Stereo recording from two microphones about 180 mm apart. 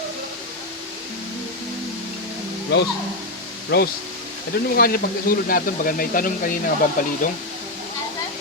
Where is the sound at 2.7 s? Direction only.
65° left (ahead or behind); by 7.1 s 45° left (ahead or behind).